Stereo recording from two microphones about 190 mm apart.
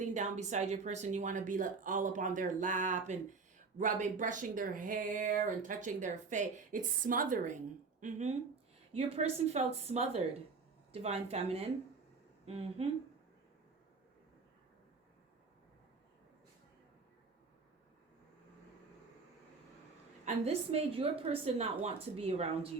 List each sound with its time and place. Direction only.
0.0 s speech: 40° right (ahead or behind)
20.2 s speech: 35° right (ahead or behind)